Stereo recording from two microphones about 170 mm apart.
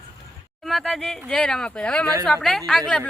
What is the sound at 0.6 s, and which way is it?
Speech, centre (ahead or behind).